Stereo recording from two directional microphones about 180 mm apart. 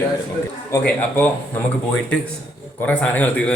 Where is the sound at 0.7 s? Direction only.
10° left (ahead or behind).